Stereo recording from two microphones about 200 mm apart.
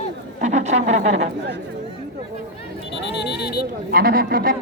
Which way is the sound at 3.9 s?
50° right (ahead or behind).